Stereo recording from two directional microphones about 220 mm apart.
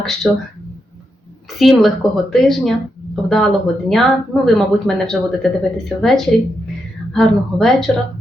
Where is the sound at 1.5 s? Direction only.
Centre (ahead or behind).